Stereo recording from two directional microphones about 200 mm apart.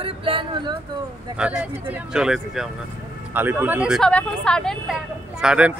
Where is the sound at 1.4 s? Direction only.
5° right (ahead or behind).